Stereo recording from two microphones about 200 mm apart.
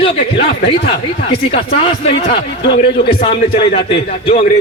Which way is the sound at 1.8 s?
30° left (ahead or behind).